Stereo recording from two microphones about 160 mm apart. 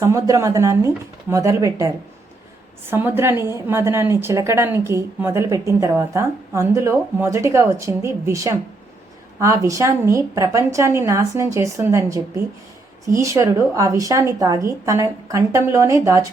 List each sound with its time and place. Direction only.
0.0 s a woman's voice: 20° right (ahead or behind)
2.9 s a woman's voice: 15° right (ahead or behind)